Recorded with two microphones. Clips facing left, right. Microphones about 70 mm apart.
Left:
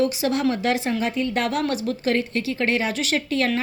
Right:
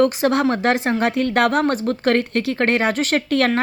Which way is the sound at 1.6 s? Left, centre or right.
Right.